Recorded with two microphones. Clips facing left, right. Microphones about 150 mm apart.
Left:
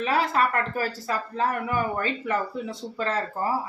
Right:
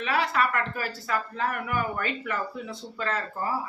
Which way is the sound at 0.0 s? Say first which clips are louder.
Left 3 dB; 40° left (ahead or behind).